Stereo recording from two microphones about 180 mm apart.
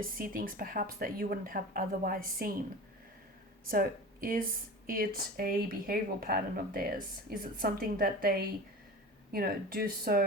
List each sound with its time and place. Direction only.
0.0 s speech: 50° right (ahead or behind)
3.7 s speech: 50° right (ahead or behind)